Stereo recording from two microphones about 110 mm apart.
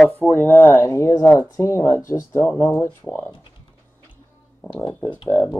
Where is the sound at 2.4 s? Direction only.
10° left (ahead or behind).